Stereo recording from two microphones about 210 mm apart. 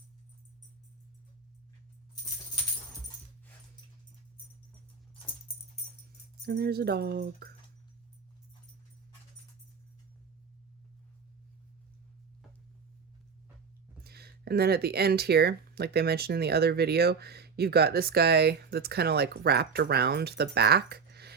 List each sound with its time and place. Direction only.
6.4 s speech: 50° right (ahead or behind)
14.0 s speech: 50° right (ahead or behind)